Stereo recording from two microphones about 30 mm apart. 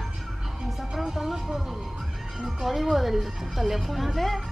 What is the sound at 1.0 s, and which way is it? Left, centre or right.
Speech, centre.